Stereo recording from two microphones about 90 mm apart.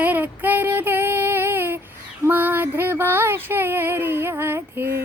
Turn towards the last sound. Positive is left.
turn(degrees=-25)  # may be behind; listen again after turning